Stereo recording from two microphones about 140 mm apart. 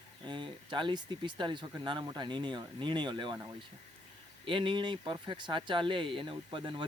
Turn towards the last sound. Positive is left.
turn(degrees=-35)  # may be behind; listen again after turning